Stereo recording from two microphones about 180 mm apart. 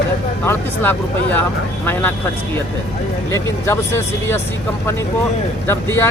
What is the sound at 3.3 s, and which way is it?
Speech, 15° left (ahead or behind).